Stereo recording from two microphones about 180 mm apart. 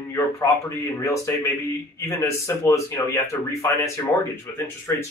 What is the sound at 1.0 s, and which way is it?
Speech, 15° left (ahead or behind).